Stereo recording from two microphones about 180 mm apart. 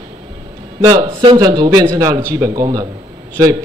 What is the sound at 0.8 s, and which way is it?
A man's voice, 20° right (ahead or behind).